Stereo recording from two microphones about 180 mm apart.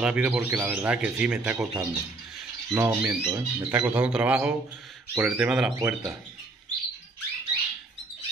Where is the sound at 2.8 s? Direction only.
15° right (ahead or behind).